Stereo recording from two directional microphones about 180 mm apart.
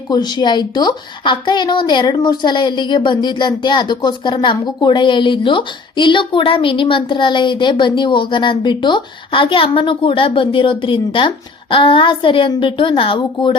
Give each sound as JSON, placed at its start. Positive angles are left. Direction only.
{"t": 0.1, "sound": "a woman's voice", "side_deg": 25}